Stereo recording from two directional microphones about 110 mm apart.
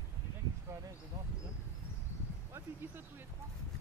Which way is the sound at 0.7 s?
25° right (ahead or behind).